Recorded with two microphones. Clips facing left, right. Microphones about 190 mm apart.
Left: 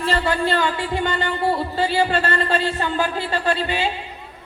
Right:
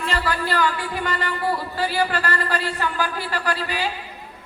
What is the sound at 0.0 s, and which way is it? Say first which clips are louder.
Speech: left 4 dB; 30° left (ahead or behind).